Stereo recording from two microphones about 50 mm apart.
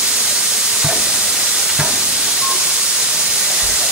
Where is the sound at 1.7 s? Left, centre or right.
Centre.